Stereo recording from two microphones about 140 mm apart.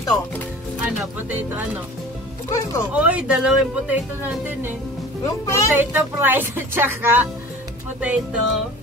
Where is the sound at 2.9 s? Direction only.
10° right (ahead or behind).